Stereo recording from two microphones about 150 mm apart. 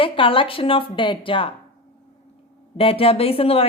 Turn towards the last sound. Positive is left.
turn(degrees=40)  # may be behind; listen again after turning